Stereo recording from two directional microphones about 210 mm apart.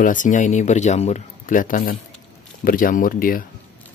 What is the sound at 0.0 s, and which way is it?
Speech, 40° left (ahead or behind).